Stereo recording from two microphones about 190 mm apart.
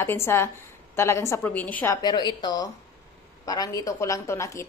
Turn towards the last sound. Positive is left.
turn(degrees=15)  # may be behind; listen again after turning